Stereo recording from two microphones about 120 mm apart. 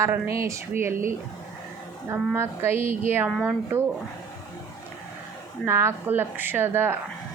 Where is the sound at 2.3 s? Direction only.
20° right (ahead or behind).